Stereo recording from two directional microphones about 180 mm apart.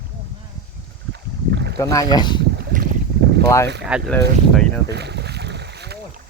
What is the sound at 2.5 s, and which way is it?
Boat, 65° right (ahead or behind).